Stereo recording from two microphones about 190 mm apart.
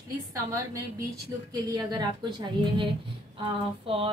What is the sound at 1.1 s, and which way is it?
A woman's voice, 20° right (ahead or behind).